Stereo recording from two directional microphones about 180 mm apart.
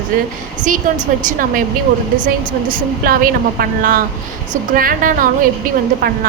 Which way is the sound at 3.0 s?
55° right (ahead or behind).